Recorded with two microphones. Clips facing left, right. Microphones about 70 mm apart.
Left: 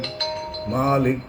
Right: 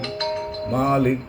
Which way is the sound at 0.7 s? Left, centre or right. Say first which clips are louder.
Even; centre.